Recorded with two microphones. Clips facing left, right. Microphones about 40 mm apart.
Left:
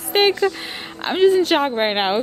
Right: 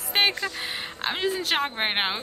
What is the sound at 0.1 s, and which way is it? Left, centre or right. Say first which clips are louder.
A woman's voice: left 8 dB; centre.